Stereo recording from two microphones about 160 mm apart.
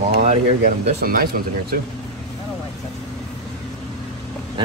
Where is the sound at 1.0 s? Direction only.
65° right (ahead or behind).